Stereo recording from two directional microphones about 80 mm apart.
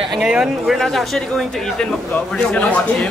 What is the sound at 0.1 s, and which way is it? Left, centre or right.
Speech, centre.